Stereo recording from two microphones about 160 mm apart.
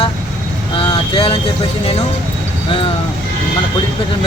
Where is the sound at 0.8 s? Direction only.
35° left (ahead or behind).